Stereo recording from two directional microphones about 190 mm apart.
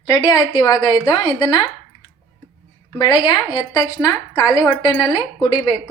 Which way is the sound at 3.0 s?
20° left (ahead or behind).